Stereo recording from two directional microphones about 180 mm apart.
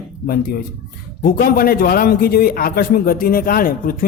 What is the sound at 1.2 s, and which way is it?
A man's voice, 55° left (ahead or behind).